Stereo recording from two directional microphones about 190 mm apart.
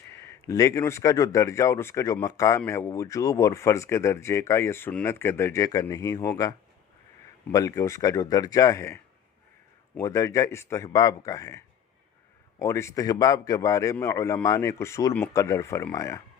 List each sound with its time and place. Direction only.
0.1 s speech: 15° left (ahead or behind)
7.5 s speech: 20° left (ahead or behind)